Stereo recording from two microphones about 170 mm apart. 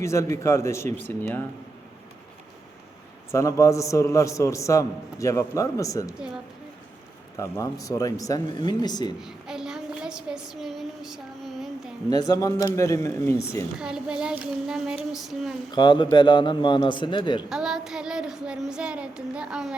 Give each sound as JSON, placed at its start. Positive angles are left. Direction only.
{"t": 0.0, "sound": "a man's voice", "side_deg": 15}
{"t": 3.3, "sound": "a man's voice", "side_deg": 20}
{"t": 6.1, "sound": "a woman's voice", "side_deg": -5}
{"t": 7.3, "sound": "speech", "side_deg": 20}
{"t": 9.2, "sound": "a child's voice", "side_deg": -5}
{"t": 12.1, "sound": "speech", "side_deg": 20}
{"t": 13.7, "sound": "child singing", "side_deg": -5}
{"t": 15.7, "sound": "speech", "side_deg": 25}
{"t": 17.5, "sound": "child singing", "side_deg": -5}